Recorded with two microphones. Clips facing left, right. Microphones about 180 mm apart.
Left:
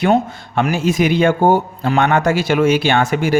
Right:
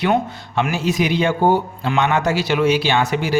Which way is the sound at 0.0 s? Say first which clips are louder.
Left 4 dB; 45° left (ahead or behind).